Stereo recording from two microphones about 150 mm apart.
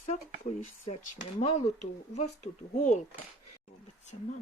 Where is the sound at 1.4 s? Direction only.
45° left (ahead or behind).